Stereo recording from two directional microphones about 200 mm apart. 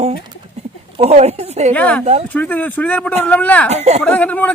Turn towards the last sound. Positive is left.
turn(degrees=10)  # may be behind; listen again after turning